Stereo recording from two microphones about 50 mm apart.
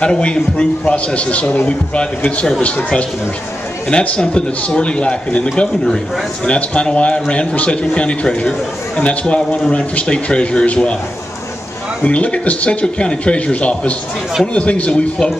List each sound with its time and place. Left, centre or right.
0.0 s a man's voice: centre
12.0 s a man's voice: left